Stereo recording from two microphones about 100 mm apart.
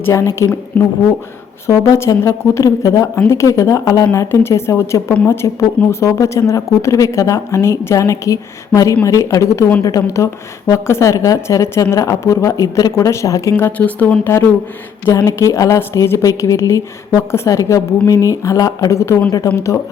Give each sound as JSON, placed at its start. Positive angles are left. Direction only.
{"t": 0.0, "sound": "speech", "side_deg": 25}
{"t": 1.6, "sound": "a woman's voice", "side_deg": 30}